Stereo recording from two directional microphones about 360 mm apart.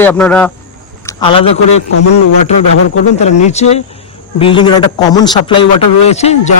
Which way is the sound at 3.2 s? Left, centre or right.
Centre.